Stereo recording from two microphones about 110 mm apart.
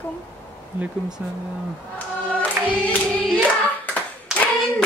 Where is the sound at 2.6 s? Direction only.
20° right (ahead or behind).